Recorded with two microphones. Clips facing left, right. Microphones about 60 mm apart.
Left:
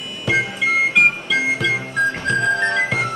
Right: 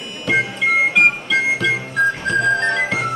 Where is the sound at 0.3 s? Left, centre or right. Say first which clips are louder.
Right 1 dB; centre.